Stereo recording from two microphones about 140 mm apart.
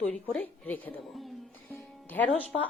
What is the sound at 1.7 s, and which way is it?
Music, 15° left (ahead or behind).